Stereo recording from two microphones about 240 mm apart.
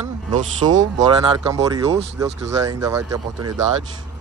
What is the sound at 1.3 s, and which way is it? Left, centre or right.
Speech, centre.